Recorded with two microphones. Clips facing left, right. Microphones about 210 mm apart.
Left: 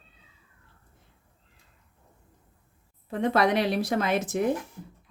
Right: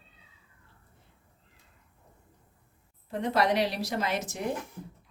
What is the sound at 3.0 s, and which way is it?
A woman's voice, 55° left (ahead or behind).